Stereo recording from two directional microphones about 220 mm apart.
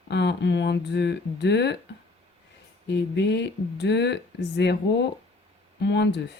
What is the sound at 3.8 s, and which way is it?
A woman's voice, 50° left (ahead or behind).